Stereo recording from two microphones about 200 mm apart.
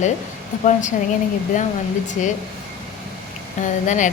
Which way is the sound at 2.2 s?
40° left (ahead or behind).